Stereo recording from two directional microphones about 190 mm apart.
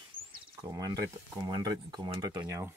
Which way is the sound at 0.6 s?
20° right (ahead or behind).